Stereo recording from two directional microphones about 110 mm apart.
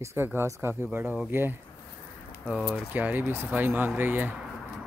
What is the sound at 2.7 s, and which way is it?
Speech, 15° right (ahead or behind).